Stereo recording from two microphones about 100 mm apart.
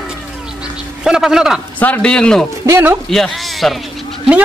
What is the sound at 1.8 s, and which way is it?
Speech, 10° left (ahead or behind).